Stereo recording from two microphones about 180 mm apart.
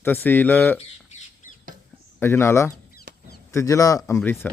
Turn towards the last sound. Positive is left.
turn(degrees=10)  # may be behind; listen again after turning